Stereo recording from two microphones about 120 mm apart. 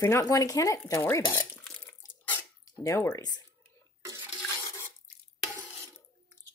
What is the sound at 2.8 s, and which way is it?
Speech, 25° left (ahead or behind).